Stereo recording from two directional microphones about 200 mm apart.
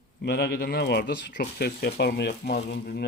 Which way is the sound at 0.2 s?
55° left (ahead or behind).